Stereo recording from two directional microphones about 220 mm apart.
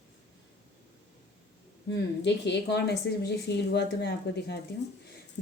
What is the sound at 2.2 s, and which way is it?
Speech, 50° left (ahead or behind).